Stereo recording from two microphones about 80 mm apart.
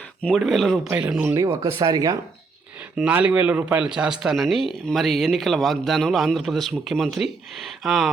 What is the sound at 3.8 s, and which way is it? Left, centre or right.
Speech, centre.